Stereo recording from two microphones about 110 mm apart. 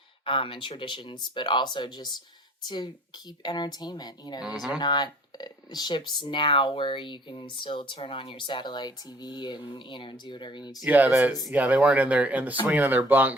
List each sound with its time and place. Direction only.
0.3 s speech: 55° left (ahead or behind); by 4.4 s 40° left (ahead or behind)
4.4 s speech: 5° right (ahead or behind)
4.8 s speech: 40° left (ahead or behind)
10.8 s speech: 15° right (ahead or behind)